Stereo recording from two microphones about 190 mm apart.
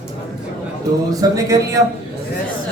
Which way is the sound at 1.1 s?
20° right (ahead or behind).